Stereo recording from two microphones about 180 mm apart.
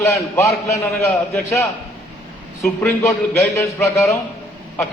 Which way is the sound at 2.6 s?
15° left (ahead or behind).